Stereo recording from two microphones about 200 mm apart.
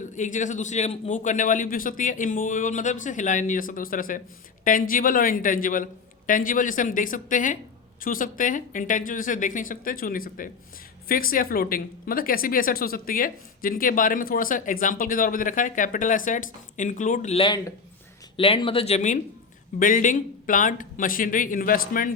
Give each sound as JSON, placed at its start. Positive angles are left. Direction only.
{"t": 0.1, "sound": "a man's voice", "side_deg": 40}